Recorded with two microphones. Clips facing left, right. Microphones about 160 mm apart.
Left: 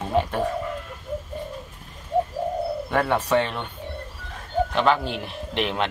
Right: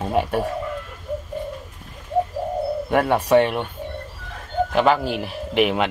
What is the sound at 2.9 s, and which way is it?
Speech, 15° right (ahead or behind).